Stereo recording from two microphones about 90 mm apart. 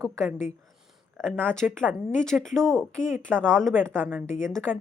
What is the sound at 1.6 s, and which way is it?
Speech, 15° right (ahead or behind).